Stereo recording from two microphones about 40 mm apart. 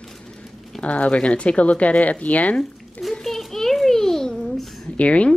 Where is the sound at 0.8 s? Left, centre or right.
Left.